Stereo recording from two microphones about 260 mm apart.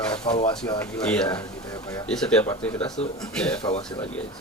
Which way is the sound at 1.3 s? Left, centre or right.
Centre.